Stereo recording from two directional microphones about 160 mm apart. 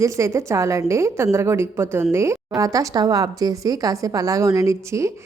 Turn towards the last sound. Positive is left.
turn(degrees=-20)  # may be behind; listen again after turning